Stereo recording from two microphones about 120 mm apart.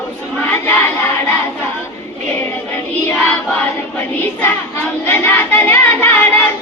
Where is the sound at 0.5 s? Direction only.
20° left (ahead or behind).